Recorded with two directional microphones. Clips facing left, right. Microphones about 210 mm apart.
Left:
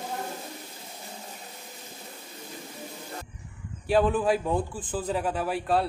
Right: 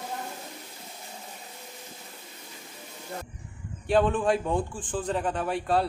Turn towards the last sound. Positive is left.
turn(degrees=5)  # may be behind; listen again after turning